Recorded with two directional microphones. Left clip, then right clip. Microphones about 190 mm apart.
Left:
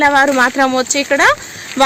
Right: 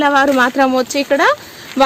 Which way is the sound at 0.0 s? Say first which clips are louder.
Left 1 dB; 25° right (ahead or behind).